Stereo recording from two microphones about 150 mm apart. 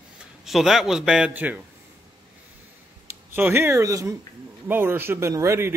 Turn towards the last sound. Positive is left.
turn(degrees=-15)  # may be behind; listen again after turning